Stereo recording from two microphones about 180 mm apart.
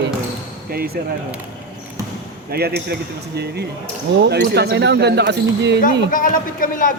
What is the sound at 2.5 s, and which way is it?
Speech, 60° right (ahead or behind).